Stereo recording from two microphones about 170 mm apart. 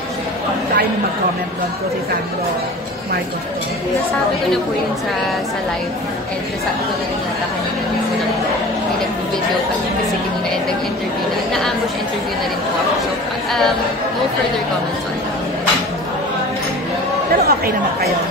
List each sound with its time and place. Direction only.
17.3 s chatter: 60° right (ahead or behind)